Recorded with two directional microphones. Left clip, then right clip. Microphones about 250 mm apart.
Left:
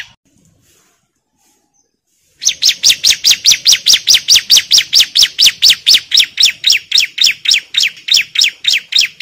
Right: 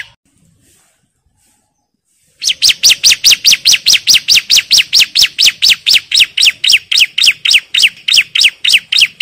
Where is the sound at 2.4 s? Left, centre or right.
Centre.